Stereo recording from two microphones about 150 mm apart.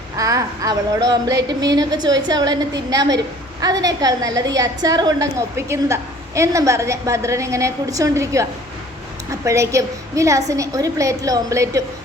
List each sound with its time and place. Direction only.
0.2 s a woman's voice: 20° right (ahead or behind)